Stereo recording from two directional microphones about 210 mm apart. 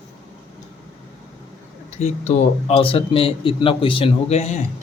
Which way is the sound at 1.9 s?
30° left (ahead or behind).